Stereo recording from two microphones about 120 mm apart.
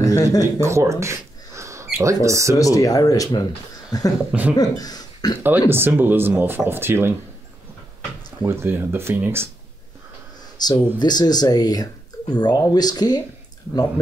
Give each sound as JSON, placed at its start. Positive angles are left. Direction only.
{"t": 0.0, "sound": "a sound", "side_deg": 30}
{"t": 0.4, "sound": "speech", "side_deg": -25}
{"t": 2.5, "sound": "speech", "side_deg": 30}
{"t": 4.3, "sound": "speech", "side_deg": -15}
{"t": 4.6, "sound": "speech", "side_deg": 35}
{"t": 5.7, "sound": "speech", "side_deg": -20}
{"t": 8.5, "sound": "speech", "side_deg": -20}
{"t": 10.6, "sound": "speech", "side_deg": 35}